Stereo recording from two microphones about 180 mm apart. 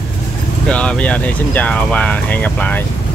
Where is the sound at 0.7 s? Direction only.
5° left (ahead or behind).